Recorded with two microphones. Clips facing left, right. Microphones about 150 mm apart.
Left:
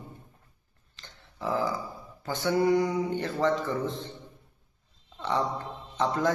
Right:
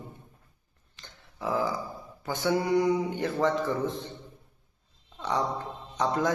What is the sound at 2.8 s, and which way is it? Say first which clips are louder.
A man's voice: right 2 dB; 20° right (ahead or behind).